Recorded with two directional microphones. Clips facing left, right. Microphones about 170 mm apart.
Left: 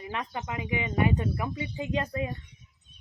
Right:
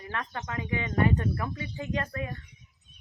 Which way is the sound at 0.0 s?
15° left (ahead or behind).